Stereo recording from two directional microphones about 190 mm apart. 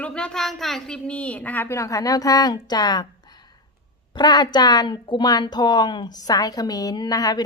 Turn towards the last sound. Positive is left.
turn(degrees=20)  # may be behind; listen again after turning